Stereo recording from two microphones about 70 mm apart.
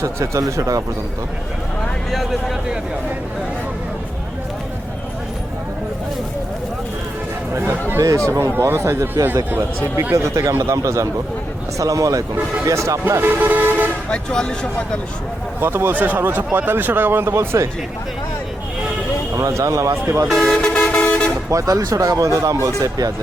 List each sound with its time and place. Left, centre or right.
0.0 s speech: right
2.0 s speech: centre
7.6 s speech: right
8.0 s speech: right
10.2 s speech: right
14.1 s speech: centre
15.6 s speech: right
19.4 s speech: right
20.2 s vehicle: centre
21.5 s speech: right